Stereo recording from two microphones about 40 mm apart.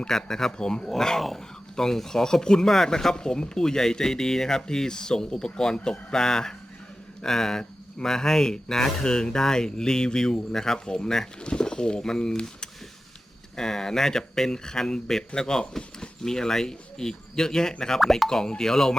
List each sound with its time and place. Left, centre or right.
0.1 s speech: centre
13.6 s speech: centre
18.0 s speech: centre
18.3 s speech: centre